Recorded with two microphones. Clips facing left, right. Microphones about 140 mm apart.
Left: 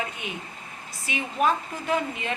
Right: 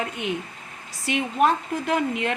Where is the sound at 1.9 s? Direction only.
80° right.